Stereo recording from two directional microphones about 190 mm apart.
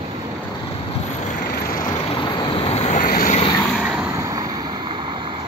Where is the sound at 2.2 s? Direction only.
30° left (ahead or behind); by 3.4 s 45° left (ahead or behind).